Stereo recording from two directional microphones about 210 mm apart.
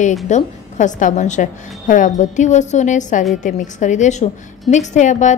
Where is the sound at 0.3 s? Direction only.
35° left (ahead or behind).